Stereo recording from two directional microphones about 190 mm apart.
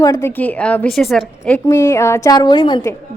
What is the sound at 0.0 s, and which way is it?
Speech, 15° left (ahead or behind).